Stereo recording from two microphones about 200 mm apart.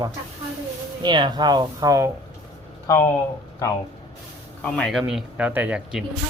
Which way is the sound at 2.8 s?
15° left (ahead or behind).